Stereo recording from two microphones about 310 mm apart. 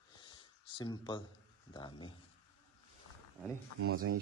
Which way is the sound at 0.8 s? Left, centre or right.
Centre.